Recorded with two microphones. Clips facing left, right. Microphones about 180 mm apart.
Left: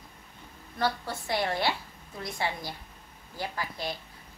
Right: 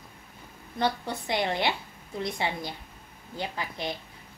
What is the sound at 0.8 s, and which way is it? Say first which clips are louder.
A woman's voice: right 2 dB; 20° right (ahead or behind).